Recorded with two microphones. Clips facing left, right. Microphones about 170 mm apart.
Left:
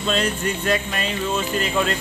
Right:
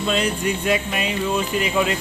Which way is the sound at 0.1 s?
10° right (ahead or behind).